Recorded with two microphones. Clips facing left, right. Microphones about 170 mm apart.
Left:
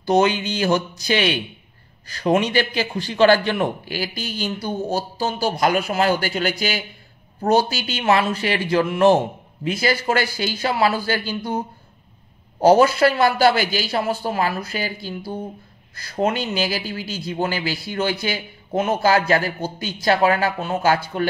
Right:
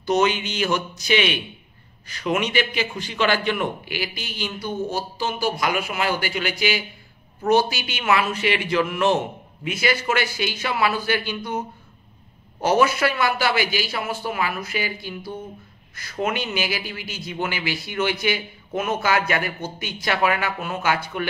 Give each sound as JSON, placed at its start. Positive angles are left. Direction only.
{"t": 0.0, "sound": "a man's voice", "side_deg": 35}